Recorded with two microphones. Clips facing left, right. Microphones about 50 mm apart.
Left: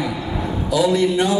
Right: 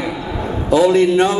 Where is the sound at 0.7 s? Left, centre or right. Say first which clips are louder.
Right 5 dB; right.